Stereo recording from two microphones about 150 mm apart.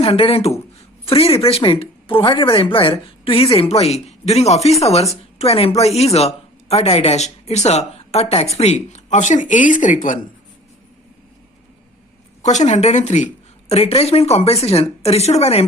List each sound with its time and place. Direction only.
0.0 s speech: 40° left (ahead or behind); by 10.2 s 60° left (ahead or behind)
12.4 s speech: 50° left (ahead or behind)